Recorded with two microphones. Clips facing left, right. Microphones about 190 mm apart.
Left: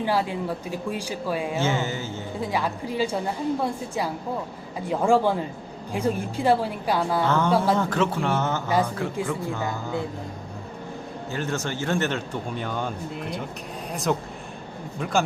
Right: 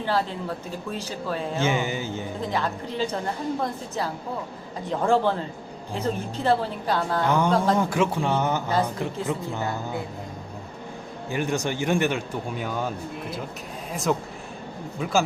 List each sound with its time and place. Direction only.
0.0 s a woman's voice: 10° left (ahead or behind)
1.6 s speech: 15° right (ahead or behind)
2.4 s a woman's voice: 10° left (ahead or behind)
7.3 s speech: 15° right (ahead or behind)
11.3 s speech: 15° right (ahead or behind)
13.9 s speech: centre (ahead or behind)